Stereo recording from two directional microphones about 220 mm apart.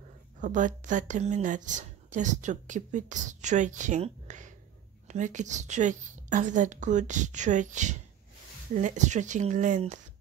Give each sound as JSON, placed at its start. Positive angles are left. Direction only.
{"t": 0.4, "sound": "speech", "side_deg": -35}